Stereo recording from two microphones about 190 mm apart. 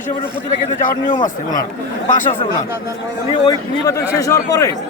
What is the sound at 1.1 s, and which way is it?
Speech, 20° left (ahead or behind).